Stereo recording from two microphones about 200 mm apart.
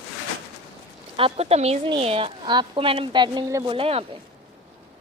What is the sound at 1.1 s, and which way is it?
A woman's voice, 30° right (ahead or behind).